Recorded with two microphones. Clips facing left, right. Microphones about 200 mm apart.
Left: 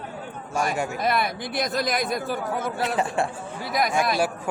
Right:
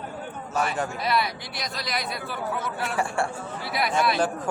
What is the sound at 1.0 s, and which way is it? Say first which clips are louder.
Speech: left 2 dB; 50° left (ahead or behind).